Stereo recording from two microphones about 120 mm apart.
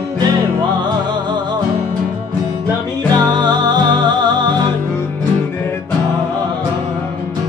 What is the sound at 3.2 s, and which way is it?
Music, 35° right (ahead or behind).